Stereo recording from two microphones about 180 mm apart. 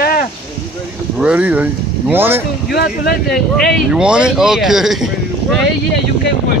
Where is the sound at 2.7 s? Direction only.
65° left (ahead or behind).